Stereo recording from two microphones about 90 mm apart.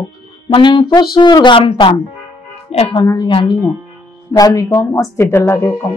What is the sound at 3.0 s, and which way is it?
Speech, 45° left (ahead or behind).